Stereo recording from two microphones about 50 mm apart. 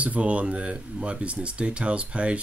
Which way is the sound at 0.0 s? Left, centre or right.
Right.